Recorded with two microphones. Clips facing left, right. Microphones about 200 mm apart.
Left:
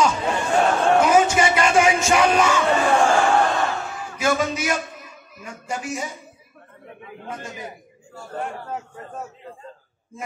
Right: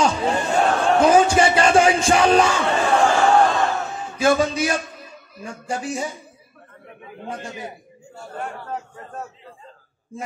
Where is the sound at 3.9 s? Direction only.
30° right (ahead or behind).